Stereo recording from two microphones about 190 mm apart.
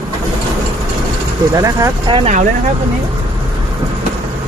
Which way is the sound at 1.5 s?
15° right (ahead or behind).